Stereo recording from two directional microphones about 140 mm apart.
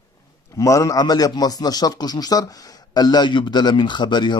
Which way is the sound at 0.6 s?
25° left (ahead or behind).